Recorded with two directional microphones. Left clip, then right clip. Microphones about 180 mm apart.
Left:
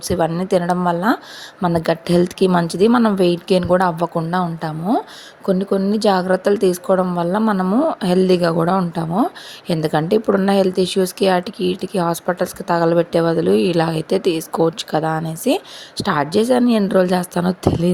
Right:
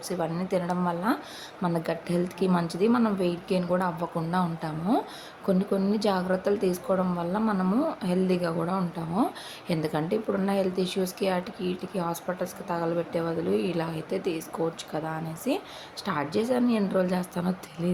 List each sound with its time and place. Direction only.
0.1 s speech: 45° left (ahead or behind)